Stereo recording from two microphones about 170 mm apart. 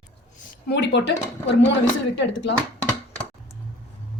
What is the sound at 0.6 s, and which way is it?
Speech, 80° left.